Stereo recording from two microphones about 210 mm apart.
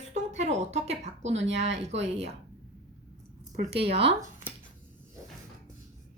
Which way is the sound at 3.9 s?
25° right (ahead or behind).